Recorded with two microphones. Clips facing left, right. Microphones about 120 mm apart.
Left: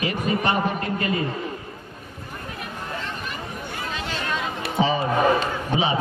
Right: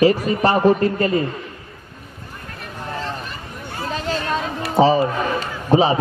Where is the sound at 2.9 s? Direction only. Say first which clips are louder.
Right 5 dB; 35° right (ahead or behind).